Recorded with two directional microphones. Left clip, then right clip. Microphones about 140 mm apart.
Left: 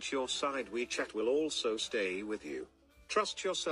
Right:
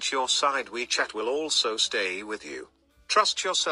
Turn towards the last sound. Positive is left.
turn(degrees=-5)  # may be behind; listen again after turning